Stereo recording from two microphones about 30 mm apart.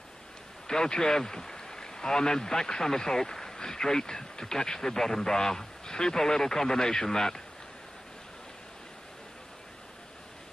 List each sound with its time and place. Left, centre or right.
0.7 s speech: left